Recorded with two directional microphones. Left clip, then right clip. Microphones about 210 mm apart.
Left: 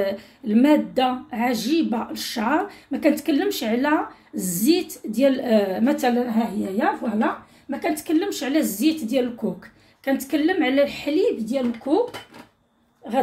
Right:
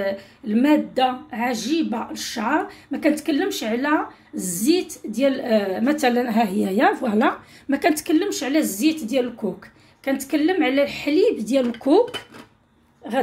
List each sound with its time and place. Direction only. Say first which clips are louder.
0.0 s speech: even; centre (ahead or behind)
6.1 s a woman's voice: right 3 dB; 40° right (ahead or behind)
8.0 s a woman's voice: right 2 dB; 20° right (ahead or behind); by 12.0 s 35° right (ahead or behind)
13.0 s a woman's voice: even; 20° right (ahead or behind)